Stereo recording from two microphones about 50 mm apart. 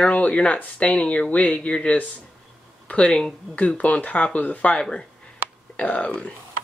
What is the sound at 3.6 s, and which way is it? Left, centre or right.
Speech, left.